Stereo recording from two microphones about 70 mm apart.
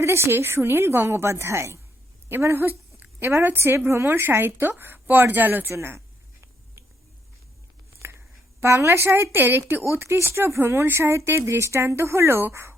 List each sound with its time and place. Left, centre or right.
0.0 s speech: right
8.0 s a sound: right
8.6 s speech: right